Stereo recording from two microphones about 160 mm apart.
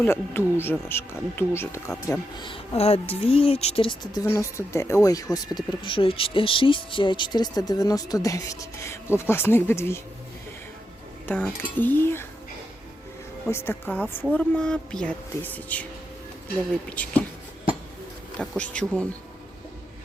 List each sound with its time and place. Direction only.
0.0 s speech: 15° left (ahead or behind)
2.4 s speech: 35° left (ahead or behind)
4.2 s speech: 20° left (ahead or behind)
11.3 s speech: 10° left (ahead or behind)
13.5 s speech: 15° left (ahead or behind)
16.9 s speech: 10° left (ahead or behind)
18.3 s speech: 5° left (ahead or behind)